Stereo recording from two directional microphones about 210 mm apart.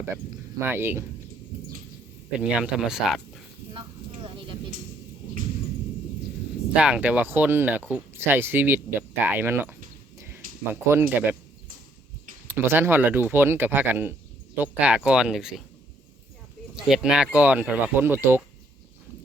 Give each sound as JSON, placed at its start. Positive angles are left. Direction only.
{"t": 0.6, "sound": "speech", "side_deg": -10}
{"t": 2.4, "sound": "speech", "side_deg": -5}
{"t": 3.8, "sound": "vehicle", "side_deg": -25}
{"t": 6.7, "sound": "speech", "side_deg": -5}
{"t": 10.2, "sound": "a sound", "side_deg": -10}
{"t": 10.6, "sound": "speech", "side_deg": -10}
{"t": 12.5, "sound": "speech", "side_deg": -10}
{"t": 16.7, "sound": "speech", "side_deg": -5}